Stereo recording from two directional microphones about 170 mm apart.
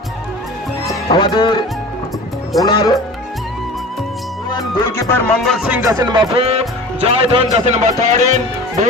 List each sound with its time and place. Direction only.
1.1 s speech: 25° left (ahead or behind)
2.6 s speech: 25° left (ahead or behind)
4.5 s music: 15° left (ahead or behind)
5.4 s speech: centre (ahead or behind)
5.8 s speech: 20° right (ahead or behind)
6.3 s speech: 35° right (ahead or behind)